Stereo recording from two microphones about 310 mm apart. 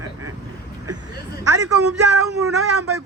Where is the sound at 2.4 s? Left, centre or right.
Right.